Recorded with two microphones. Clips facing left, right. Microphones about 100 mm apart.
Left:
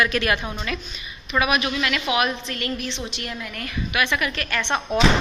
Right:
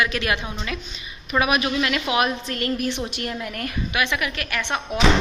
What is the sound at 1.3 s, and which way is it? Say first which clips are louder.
A woman's voice: right 1 dB; 35° right (ahead or behind).